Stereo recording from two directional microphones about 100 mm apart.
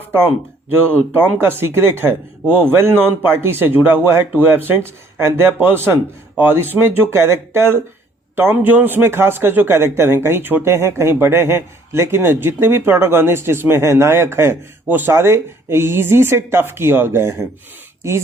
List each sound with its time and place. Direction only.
0.9 s a man's voice: 20° right (ahead or behind)